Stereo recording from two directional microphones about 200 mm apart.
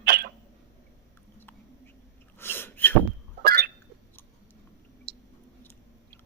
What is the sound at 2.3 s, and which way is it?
Sneeze, 10° left (ahead or behind).